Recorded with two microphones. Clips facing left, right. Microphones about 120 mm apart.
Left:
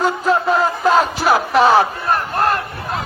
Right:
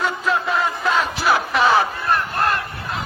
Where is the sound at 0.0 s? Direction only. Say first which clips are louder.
Left 5 dB; 40° left (ahead or behind).